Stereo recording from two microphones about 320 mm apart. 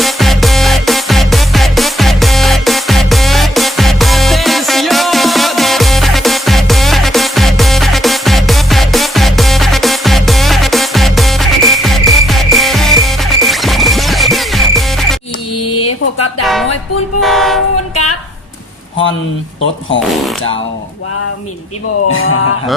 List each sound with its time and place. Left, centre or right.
0.0 s music: centre
16.4 s music: centre
17.2 s train: centre
17.9 s a sound: left
22.1 s music: left